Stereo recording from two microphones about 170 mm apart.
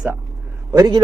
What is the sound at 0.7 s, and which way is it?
Speech, 20° right (ahead or behind).